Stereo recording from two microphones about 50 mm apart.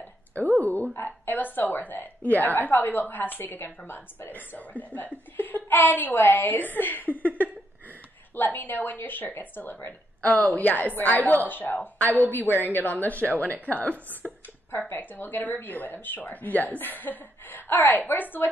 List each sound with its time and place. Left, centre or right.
0.3 s a woman's voice: left
0.9 s a woman's voice: left
4.3 s a woman's voice: left
14.7 s a woman's voice: left